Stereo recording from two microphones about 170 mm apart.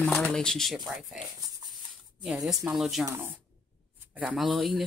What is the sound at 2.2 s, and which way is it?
Speech, centre (ahead or behind).